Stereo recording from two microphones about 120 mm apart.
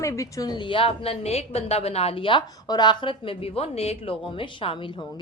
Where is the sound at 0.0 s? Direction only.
25° left (ahead or behind).